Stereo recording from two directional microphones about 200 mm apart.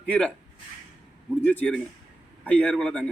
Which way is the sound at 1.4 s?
10° left (ahead or behind).